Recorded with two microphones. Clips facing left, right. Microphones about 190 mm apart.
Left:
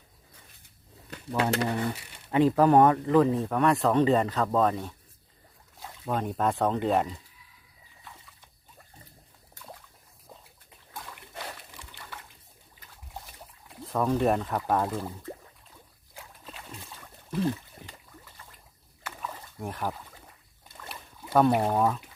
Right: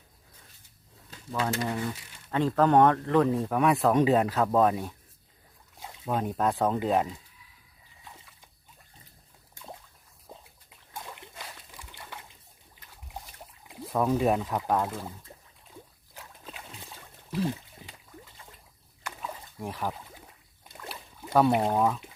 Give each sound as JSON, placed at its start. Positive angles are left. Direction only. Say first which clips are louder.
{"t": 1.4, "sound": "speech", "louder": "left 3 dB", "side_deg": 65}
{"t": 2.3, "sound": "speech", "louder": "left 3 dB", "side_deg": 15}
{"t": 2.6, "sound": "speech", "louder": "left 1 dB", "side_deg": 5}
{"t": 6.1, "sound": "speech", "louder": "even", "side_deg": 0}
{"t": 10.3, "sound": "a sound", "louder": "right 2 dB", "side_deg": -15}
{"t": 13.8, "sound": "speech", "louder": "even", "side_deg": -5}
{"t": 19.6, "sound": "speech", "louder": "even", "side_deg": 0}
{"t": 21.3, "sound": "speech", "louder": "even", "side_deg": 0}